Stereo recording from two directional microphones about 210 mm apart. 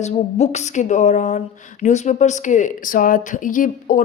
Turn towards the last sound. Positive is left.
turn(degrees=40)  # may be behind; listen again after turning